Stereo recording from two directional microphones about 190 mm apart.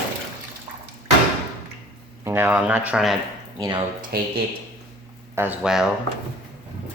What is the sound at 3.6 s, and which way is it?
Speech, 20° right (ahead or behind).